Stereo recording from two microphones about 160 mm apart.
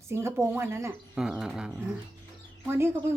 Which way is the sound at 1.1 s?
5° right (ahead or behind).